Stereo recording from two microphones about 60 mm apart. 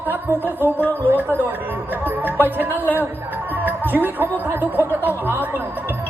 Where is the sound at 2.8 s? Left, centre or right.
Left.